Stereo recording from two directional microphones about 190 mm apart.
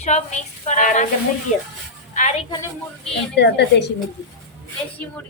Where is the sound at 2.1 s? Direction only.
40° left (ahead or behind).